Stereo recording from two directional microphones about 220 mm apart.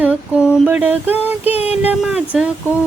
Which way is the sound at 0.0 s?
5° right (ahead or behind).